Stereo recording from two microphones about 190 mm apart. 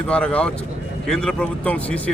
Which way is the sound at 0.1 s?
5° left (ahead or behind).